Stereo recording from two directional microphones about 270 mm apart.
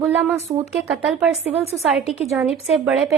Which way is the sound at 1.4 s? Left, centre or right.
Right.